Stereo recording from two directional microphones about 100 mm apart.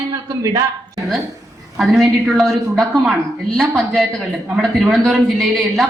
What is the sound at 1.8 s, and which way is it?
Speech, centre (ahead or behind).